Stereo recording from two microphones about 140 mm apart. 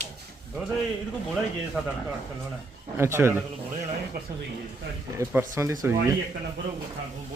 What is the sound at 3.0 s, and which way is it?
Speech, 20° right (ahead or behind).